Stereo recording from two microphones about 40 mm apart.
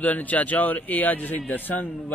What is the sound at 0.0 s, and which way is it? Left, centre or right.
A man's voice, left.